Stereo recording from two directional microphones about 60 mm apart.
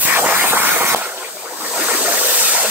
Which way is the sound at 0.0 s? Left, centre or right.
Right.